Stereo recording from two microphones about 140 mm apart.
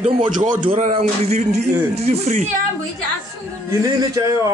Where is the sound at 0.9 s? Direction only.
50° right (ahead or behind).